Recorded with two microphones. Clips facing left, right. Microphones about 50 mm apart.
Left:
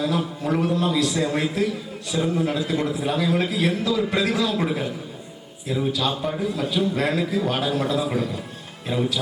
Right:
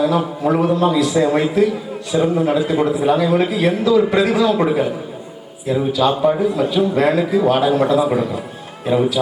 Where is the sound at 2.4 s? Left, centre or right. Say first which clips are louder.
Right 7 dB; right.